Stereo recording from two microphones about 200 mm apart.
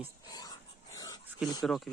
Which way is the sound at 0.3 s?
20° left (ahead or behind).